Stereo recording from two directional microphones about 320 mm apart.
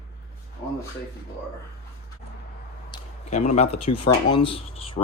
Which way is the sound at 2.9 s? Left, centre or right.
Left.